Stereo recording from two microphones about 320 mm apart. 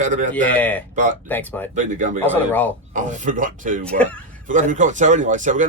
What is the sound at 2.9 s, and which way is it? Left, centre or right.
Speech, right.